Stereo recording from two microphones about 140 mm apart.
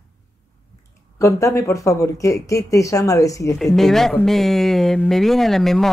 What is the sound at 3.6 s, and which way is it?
Speech, centre (ahead or behind).